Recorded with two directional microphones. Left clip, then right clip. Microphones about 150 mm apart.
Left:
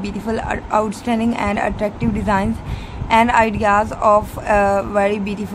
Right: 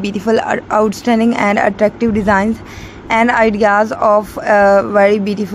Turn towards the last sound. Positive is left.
turn(degrees=-30)  # may be behind; listen again after turning